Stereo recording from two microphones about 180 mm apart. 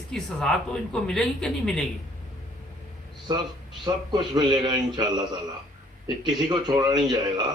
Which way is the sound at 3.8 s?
25° right (ahead or behind).